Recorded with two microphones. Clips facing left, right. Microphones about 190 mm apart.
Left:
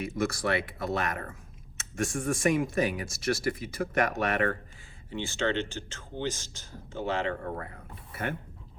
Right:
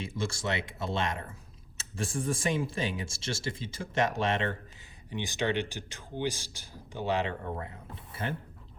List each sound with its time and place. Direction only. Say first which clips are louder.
0.0 s speech: left 4 dB; 25° right (ahead or behind)